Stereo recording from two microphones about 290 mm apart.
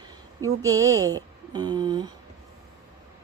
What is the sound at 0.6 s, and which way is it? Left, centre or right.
Speech, centre.